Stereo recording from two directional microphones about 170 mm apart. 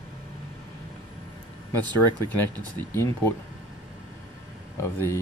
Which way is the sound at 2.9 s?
15° left (ahead or behind).